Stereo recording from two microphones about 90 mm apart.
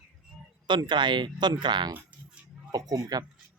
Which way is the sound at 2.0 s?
20° right (ahead or behind).